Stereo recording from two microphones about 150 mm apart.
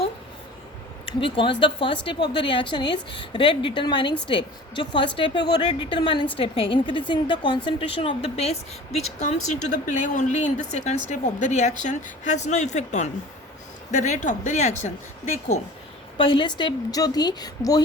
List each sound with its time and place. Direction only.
1.0 s a woman's voice: 35° left (ahead or behind); by 14.8 s 50° left (ahead or behind)
16.1 s a woman's voice: 35° left (ahead or behind)